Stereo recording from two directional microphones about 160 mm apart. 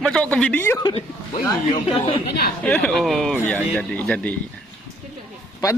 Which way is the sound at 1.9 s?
35° left (ahead or behind).